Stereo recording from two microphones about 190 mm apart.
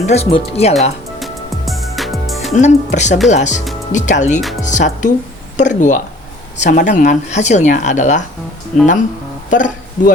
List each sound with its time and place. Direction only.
0.1 s speech: 30° left (ahead or behind)
1.2 s music: centre (ahead or behind)
2.6 s speech: 40° left (ahead or behind)
4.4 s speech: centre (ahead or behind)
4.6 s speech: 40° left (ahead or behind)
9.5 s guitar: 40° left (ahead or behind)